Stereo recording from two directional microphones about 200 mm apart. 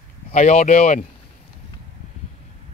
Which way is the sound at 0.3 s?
35° left (ahead or behind).